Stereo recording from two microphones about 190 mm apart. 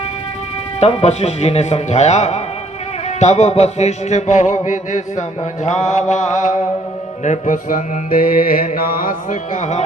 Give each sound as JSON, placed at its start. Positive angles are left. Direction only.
{"t": 0.8, "sound": "music", "side_deg": 35}
{"t": 7.3, "sound": "mantra", "side_deg": 40}